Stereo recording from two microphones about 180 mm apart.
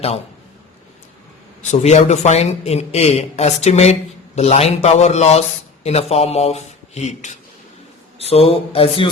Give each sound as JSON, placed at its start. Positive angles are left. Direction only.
{"t": 1.6, "sound": "speech", "side_deg": 40}